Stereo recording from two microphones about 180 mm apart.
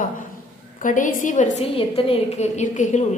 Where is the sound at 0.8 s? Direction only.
45° left (ahead or behind).